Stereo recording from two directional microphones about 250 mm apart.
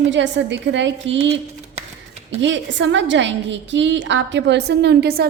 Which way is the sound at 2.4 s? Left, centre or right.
Right.